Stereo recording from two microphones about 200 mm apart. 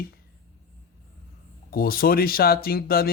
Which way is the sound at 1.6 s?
50° left (ahead or behind).